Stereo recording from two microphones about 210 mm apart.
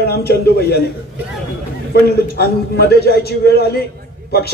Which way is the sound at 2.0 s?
50° left (ahead or behind).